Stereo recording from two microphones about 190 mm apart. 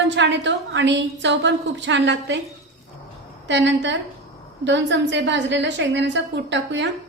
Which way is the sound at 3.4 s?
70° right (ahead or behind).